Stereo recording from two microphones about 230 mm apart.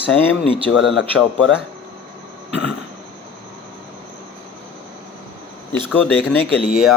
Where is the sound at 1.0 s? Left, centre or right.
Left.